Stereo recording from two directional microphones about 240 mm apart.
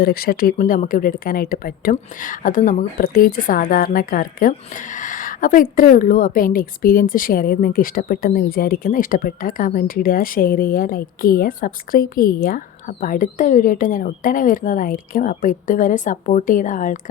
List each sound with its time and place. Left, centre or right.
0.0 s a woman's voice: left
4.9 s a sound: left
5.7 s a woman's voice: left